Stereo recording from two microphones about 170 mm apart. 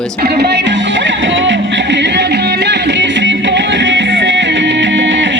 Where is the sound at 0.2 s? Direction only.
75° right (ahead or behind).